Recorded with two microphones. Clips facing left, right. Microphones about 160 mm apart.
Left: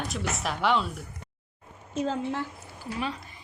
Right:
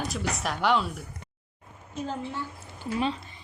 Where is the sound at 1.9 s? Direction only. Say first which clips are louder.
Left 5 dB; 90° left.